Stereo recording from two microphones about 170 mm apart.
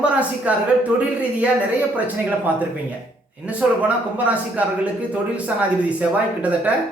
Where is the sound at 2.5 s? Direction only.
10° right (ahead or behind).